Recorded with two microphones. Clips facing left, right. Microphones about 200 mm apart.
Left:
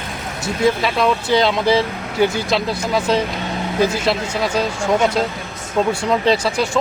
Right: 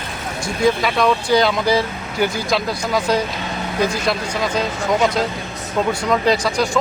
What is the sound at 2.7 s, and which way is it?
Speech, centre (ahead or behind).